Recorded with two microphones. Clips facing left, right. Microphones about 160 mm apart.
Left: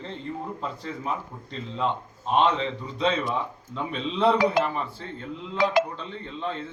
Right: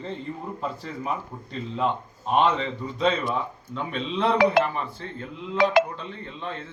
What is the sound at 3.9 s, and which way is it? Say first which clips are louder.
A man's voice: left 2 dB; centre (ahead or behind).